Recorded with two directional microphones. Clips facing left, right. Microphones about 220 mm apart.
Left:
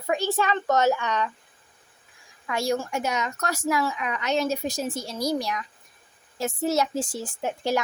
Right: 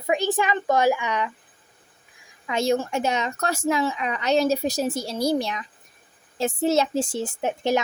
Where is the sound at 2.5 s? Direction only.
20° right (ahead or behind).